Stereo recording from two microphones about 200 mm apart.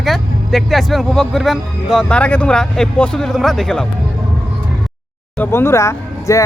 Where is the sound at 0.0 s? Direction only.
Centre (ahead or behind).